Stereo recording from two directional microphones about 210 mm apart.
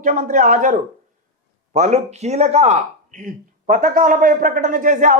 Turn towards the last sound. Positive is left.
turn(degrees=-40)  # may be behind; listen again after turning